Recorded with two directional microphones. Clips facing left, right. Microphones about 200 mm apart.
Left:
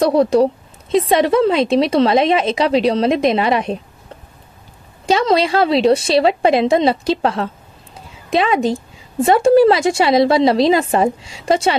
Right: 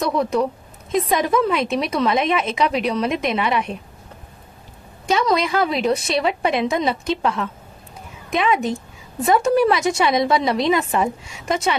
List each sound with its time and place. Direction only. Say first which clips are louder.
0.0 s a woman's voice: left 7 dB; 35° left (ahead or behind)
0.9 s a woman's voice: left 6 dB; 80° left
1.3 s a woman's voice: left 6 dB; 30° left (ahead or behind)
5.0 s a woman's voice: left 4 dB; 30° left (ahead or behind)